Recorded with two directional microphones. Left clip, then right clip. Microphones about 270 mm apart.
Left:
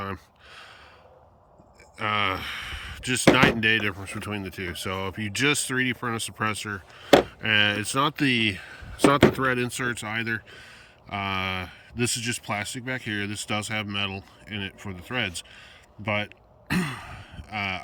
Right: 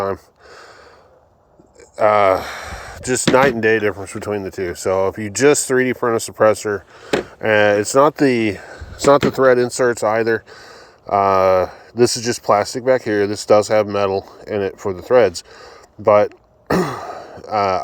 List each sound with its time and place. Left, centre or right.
0.0 s a sound: centre
2.0 s speech: centre
16.7 s speech: centre